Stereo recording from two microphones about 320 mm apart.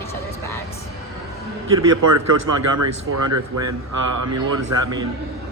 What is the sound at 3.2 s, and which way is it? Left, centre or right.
Speech, right.